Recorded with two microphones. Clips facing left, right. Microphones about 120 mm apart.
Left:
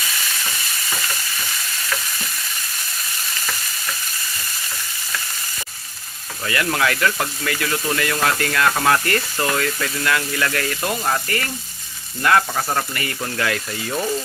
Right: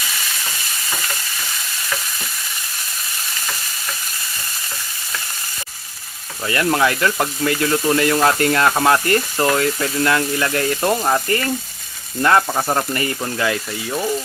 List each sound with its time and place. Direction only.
6.4 s speech: 25° right (ahead or behind)